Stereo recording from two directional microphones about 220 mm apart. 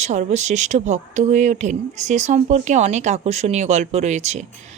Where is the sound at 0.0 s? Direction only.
30° right (ahead or behind).